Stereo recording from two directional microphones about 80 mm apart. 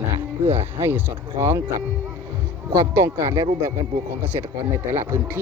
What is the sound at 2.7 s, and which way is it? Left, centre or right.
Speech, right.